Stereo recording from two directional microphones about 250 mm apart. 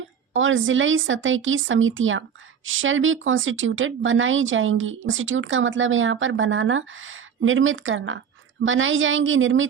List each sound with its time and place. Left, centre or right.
0.3 s speech: right